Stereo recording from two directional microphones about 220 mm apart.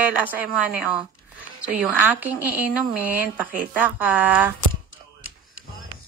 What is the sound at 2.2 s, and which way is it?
A woman's voice, 5° right (ahead or behind).